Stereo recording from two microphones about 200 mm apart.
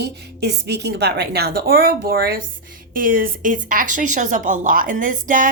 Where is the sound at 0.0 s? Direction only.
55° right (ahead or behind).